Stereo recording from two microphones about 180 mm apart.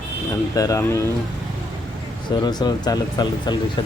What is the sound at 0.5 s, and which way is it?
Speech, 20° left (ahead or behind).